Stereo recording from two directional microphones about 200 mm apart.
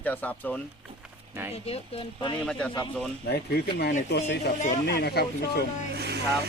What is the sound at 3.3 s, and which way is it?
Speech, 50° left (ahead or behind).